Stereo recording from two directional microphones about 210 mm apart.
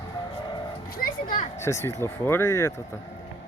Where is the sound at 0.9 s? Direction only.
45° left (ahead or behind).